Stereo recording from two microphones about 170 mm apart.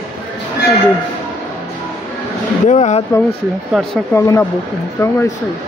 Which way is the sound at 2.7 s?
40° left (ahead or behind).